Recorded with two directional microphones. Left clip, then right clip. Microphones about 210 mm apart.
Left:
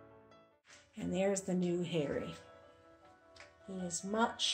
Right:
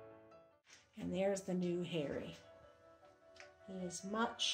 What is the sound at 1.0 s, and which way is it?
Speech, centre (ahead or behind).